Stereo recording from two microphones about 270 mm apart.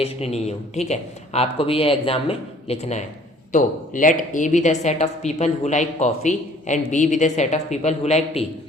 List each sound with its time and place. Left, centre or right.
0.0 s speech: left